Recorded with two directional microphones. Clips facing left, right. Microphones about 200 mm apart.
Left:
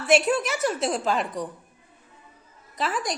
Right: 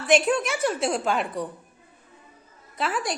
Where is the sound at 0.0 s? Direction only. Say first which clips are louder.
Even; 5° left (ahead or behind).